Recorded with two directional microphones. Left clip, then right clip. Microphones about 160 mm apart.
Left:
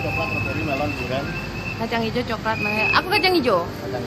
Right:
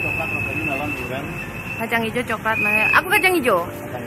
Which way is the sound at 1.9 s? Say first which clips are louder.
Right 3 dB; centre (ahead or behind).